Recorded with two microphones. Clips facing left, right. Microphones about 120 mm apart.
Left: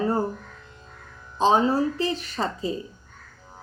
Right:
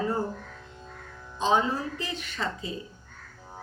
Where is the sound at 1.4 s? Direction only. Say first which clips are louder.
Left 5 dB; 35° left (ahead or behind).